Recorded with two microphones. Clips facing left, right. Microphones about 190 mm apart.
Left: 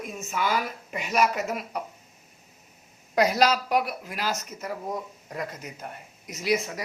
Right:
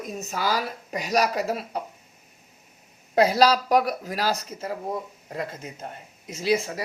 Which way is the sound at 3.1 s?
30° right (ahead or behind).